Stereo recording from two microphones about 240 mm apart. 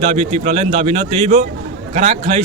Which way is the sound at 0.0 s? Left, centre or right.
Right.